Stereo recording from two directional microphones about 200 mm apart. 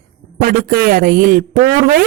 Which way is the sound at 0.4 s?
50° right (ahead or behind).